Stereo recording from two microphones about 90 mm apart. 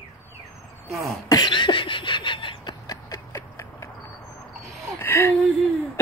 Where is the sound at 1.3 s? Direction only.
60° left (ahead or behind).